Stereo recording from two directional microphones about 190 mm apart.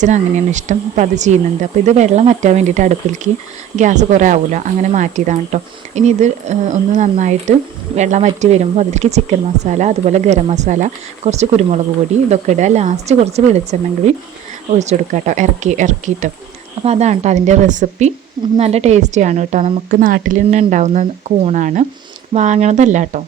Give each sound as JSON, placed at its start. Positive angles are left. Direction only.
{"t": 0.0, "sound": "speech", "side_deg": -40}
{"t": 14.8, "sound": "speech", "side_deg": -40}